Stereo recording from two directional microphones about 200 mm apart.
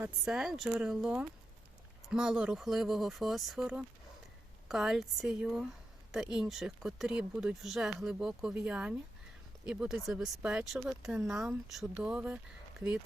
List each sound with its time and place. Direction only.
0.0 s speech: 5° right (ahead or behind)